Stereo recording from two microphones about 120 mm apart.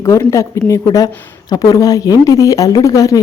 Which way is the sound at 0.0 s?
25° left (ahead or behind).